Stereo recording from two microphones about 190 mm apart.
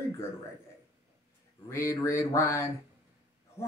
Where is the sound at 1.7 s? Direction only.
15° left (ahead or behind).